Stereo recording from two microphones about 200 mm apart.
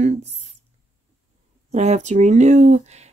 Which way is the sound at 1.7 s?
35° right (ahead or behind).